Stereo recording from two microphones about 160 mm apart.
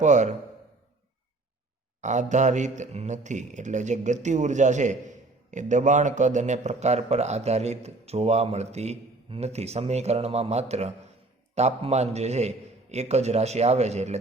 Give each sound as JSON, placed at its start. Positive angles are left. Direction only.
{"t": 0.0, "sound": "a man's voice", "side_deg": -50}
{"t": 2.0, "sound": "a man's voice", "side_deg": -50}